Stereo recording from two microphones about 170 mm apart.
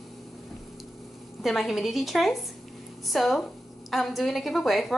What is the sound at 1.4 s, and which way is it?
A woman's voice, centre (ahead or behind).